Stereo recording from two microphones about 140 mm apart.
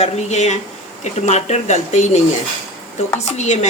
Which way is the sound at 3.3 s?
55° left (ahead or behind).